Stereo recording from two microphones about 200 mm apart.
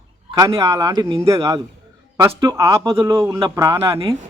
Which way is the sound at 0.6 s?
15° right (ahead or behind).